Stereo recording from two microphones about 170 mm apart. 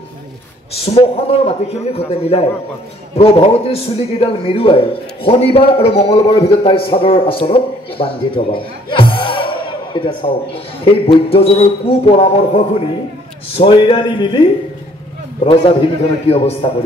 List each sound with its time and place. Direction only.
0.8 s a man's voice: 35° left (ahead or behind)